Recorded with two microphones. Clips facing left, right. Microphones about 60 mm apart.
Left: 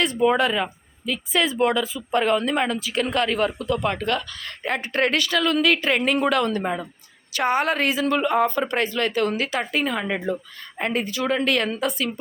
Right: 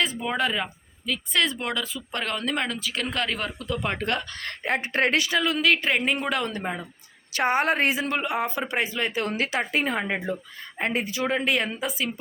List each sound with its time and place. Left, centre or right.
0.0 s speech: centre
3.8 s speech: right
5.5 s speech: centre
7.3 s speech: right; by 9.2 s centre
9.2 s speech: right
10.1 s speech: centre
11.4 s speech: centre